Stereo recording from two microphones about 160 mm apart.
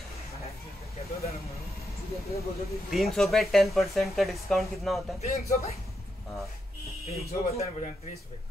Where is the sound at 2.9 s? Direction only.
Centre (ahead or behind).